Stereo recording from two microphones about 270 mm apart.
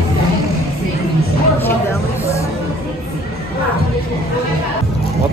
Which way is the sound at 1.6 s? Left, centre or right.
Centre.